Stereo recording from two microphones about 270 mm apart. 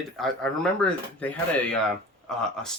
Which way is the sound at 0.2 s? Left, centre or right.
Centre.